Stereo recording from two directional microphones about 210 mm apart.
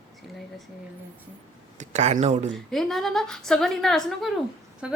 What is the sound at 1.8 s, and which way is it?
Speech, 35° right (ahead or behind).